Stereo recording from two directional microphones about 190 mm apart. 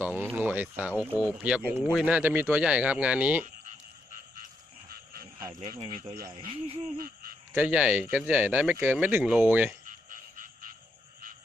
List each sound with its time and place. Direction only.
0.0 s a sound: 10° right (ahead or behind)
0.3 s speech: 5° right (ahead or behind)
5.7 s speech: 25° right (ahead or behind)
7.0 s speech: 50° right (ahead or behind)
7.5 s speech: 5° right (ahead or behind)
9.8 s frog: 45° right (ahead or behind)